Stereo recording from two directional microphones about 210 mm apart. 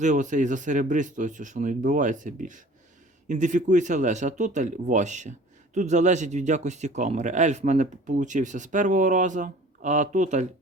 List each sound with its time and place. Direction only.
0.0 s speech: 35° right (ahead or behind)